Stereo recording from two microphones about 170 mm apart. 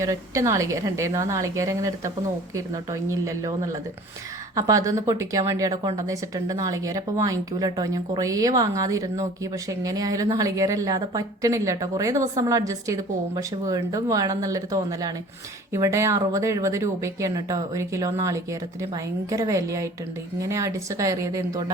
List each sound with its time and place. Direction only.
0.0 s a woman's voice: 15° right (ahead or behind)